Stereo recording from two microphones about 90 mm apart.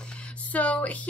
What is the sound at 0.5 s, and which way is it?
Speech, 15° left (ahead or behind).